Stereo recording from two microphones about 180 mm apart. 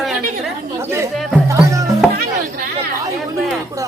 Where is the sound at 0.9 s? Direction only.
15° right (ahead or behind).